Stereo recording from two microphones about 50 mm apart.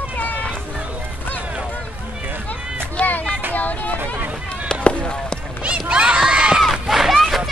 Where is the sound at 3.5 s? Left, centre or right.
Left.